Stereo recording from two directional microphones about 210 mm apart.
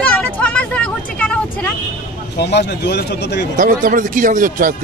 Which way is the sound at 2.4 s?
55° left (ahead or behind).